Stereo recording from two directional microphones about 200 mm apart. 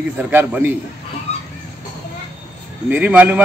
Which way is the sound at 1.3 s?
35° left (ahead or behind).